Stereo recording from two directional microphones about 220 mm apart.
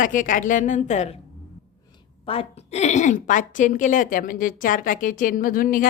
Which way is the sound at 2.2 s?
25° left (ahead or behind).